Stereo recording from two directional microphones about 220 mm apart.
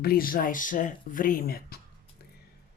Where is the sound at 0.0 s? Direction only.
40° left (ahead or behind).